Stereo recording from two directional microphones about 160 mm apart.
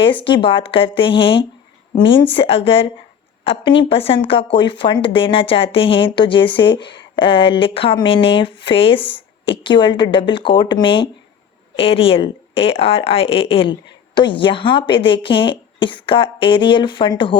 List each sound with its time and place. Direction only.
0.3 s speech: 30° left (ahead or behind)